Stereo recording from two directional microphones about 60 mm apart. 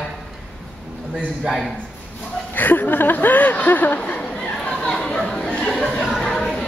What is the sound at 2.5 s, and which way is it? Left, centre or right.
Speech, left.